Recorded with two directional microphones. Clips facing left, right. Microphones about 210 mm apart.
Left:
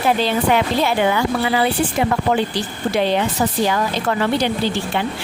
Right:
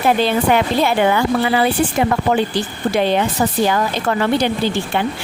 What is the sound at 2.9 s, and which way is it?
Speech, 55° right (ahead or behind).